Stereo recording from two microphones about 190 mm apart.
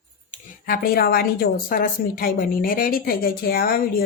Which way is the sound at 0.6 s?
50° left (ahead or behind).